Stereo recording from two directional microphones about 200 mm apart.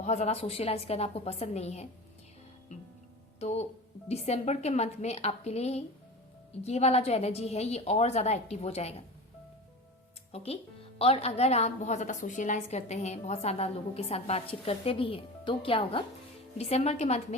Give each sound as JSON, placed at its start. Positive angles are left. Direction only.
{"t": 0.0, "sound": "a woman's voice", "side_deg": 35}
{"t": 3.4, "sound": "a woman's voice", "side_deg": 30}
{"t": 10.3, "sound": "a woman's voice", "side_deg": 30}